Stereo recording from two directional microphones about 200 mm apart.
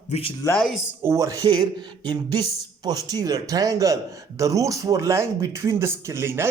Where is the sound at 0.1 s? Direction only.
30° left (ahead or behind).